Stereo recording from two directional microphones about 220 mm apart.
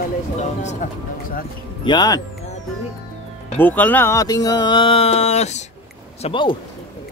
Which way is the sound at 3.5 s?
10° left (ahead or behind).